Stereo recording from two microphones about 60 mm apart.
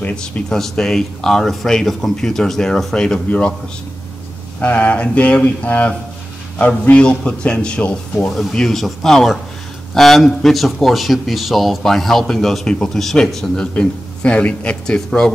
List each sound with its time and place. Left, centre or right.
0.1 s speech: centre
4.6 s speech: left
8.3 s speech: centre; by 15.0 s left
15.0 s speech: centre